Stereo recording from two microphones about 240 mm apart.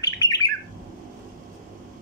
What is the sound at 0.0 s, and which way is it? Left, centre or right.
Bird, centre.